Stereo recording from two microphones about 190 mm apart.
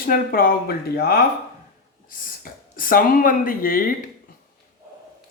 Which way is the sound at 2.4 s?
45° left (ahead or behind).